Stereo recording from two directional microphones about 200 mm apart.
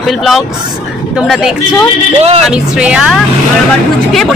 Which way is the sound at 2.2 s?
30° right (ahead or behind).